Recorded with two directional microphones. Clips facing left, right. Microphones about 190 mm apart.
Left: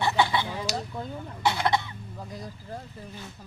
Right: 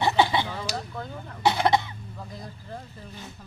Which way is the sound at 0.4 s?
15° left (ahead or behind).